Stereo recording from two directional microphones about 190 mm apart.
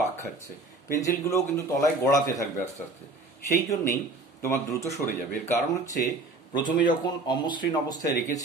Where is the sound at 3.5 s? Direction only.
15° left (ahead or behind).